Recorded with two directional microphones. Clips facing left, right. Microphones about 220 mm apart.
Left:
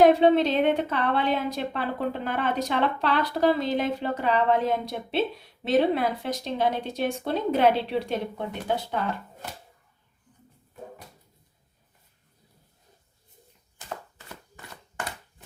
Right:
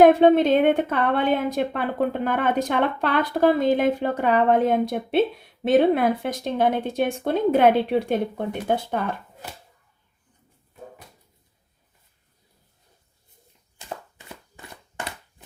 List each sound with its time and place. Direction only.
0.0 s a woman's voice: 50° right (ahead or behind)